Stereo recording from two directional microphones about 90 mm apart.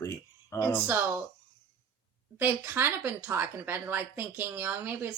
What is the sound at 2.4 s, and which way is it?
A woman's voice, 25° right (ahead or behind).